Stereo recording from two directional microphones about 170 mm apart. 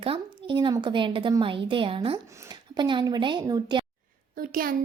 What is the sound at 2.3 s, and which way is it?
Speech, 20° right (ahead or behind).